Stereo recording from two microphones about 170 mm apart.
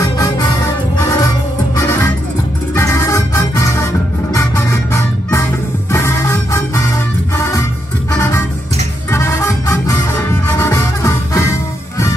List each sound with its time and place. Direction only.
0.0 s music: 20° left (ahead or behind)
2.7 s music: 15° left (ahead or behind)
8.1 s music: 15° left (ahead or behind)